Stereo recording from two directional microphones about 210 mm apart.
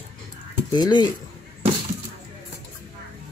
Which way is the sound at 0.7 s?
20° left (ahead or behind).